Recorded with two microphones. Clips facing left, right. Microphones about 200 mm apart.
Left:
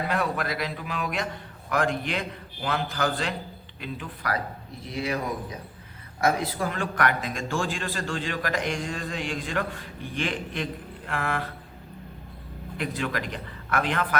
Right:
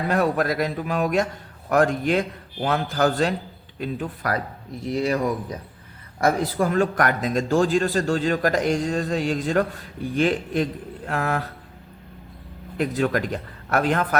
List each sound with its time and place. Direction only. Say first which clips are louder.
0.1 s a man's voice: right 6 dB; 45° right (ahead or behind)
6.2 s speech: right 4 dB; 45° right (ahead or behind)
12.7 s a man's voice: right 7 dB; 45° right (ahead or behind)